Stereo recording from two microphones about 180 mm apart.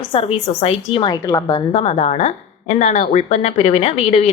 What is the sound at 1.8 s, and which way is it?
A woman's voice, 35° left (ahead or behind).